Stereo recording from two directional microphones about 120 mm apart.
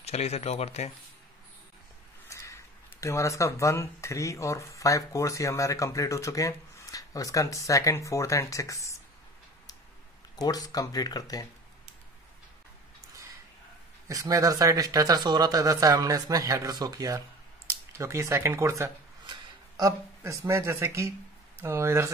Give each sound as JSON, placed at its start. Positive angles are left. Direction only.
{"t": 0.0, "sound": "speech", "side_deg": 60}
{"t": 2.2, "sound": "speech", "side_deg": 25}
{"t": 10.3, "sound": "speech", "side_deg": 30}
{"t": 14.0, "sound": "speech", "side_deg": -30}